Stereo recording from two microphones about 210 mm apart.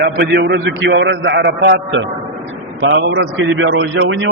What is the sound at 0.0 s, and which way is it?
A man's voice, 50° right (ahead or behind).